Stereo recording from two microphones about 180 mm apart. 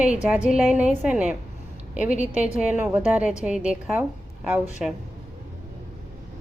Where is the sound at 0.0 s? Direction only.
5° right (ahead or behind).